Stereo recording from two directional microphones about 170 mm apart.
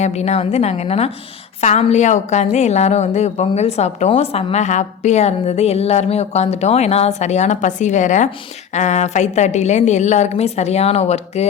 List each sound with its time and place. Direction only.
0.0 s a woman's voice: 40° left (ahead or behind)